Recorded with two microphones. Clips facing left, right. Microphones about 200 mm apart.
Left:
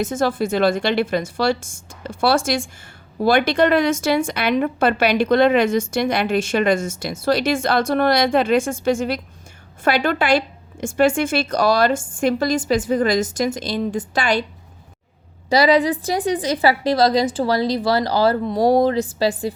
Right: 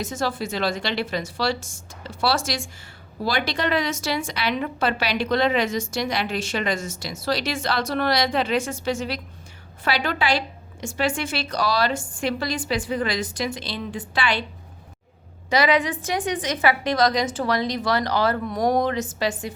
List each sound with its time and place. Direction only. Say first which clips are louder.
0.0 s a woman's voice: left 7 dB; 50° left (ahead or behind)
15.4 s a woman's voice: left 5 dB; 35° left (ahead or behind)